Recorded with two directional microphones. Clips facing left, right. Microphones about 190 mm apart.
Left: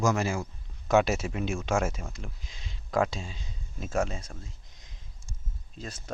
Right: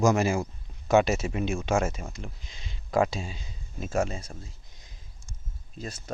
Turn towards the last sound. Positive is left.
turn(degrees=-5)  # may be behind; listen again after turning